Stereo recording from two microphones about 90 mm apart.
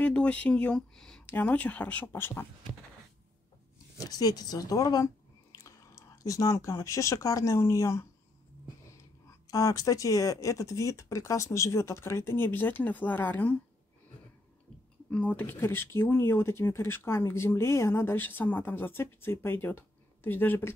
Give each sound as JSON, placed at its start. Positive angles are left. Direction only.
{"t": 0.0, "sound": "speech", "side_deg": 15}
{"t": 1.3, "sound": "speech", "side_deg": 15}
{"t": 4.0, "sound": "speech", "side_deg": 45}
{"t": 9.5, "sound": "speech", "side_deg": 40}
{"t": 15.0, "sound": "speech", "side_deg": 15}